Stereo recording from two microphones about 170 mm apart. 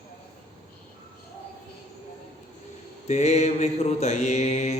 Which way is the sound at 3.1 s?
40° left (ahead or behind).